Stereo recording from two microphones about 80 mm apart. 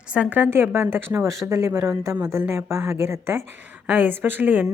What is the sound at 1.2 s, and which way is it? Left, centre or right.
A woman's voice, right.